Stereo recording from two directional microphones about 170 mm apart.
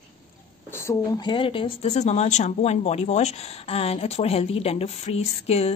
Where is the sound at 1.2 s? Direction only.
30° left (ahead or behind).